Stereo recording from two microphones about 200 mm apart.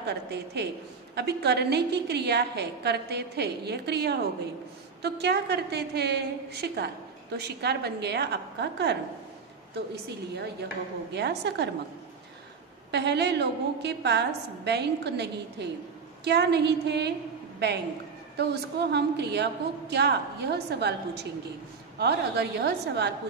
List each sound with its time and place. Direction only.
0.0 s a woman's voice: 55° right (ahead or behind)
10.0 s a woman's voice: 55° right (ahead or behind)
12.9 s a woman's voice: 55° right (ahead or behind)
18.4 s a woman's voice: 55° right (ahead or behind)